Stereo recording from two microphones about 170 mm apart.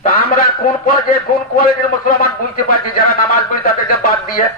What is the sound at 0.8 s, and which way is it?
A man's voice, 55° left (ahead or behind).